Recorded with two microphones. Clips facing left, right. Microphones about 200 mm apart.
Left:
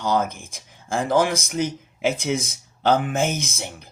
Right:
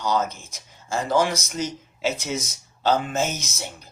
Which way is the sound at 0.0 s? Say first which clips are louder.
Left 2 dB; 55° left (ahead or behind).